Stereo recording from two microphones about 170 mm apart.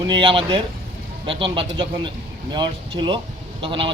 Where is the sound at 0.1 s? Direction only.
30° right (ahead or behind).